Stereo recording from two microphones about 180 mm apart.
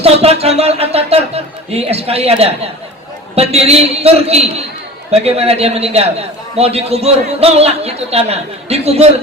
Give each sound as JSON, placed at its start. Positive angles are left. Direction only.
{"t": 0.0, "sound": "speech", "side_deg": -35}